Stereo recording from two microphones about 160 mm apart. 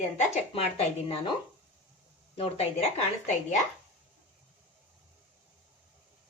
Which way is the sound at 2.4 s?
40° left (ahead or behind).